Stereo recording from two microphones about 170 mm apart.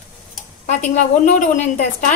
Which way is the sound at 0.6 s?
45° left (ahead or behind).